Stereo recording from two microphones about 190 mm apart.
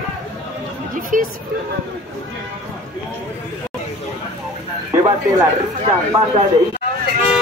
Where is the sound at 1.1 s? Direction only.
45° right (ahead or behind).